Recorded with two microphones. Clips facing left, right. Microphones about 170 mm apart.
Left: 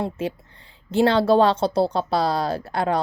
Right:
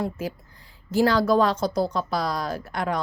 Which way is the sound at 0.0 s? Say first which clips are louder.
Left 2 dB; 25° left (ahead or behind).